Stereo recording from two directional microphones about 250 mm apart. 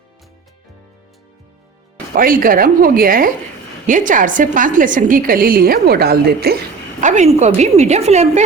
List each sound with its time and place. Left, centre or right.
2.1 s a woman's voice: right